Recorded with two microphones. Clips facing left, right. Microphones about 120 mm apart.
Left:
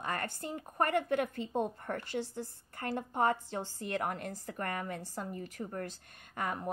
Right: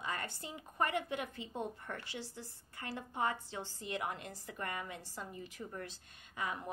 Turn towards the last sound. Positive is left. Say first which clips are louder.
# left 4 dB
turn(degrees=55)  # may be behind; listen again after turning